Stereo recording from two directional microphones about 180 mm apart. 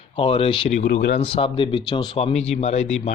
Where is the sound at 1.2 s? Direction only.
30° left (ahead or behind).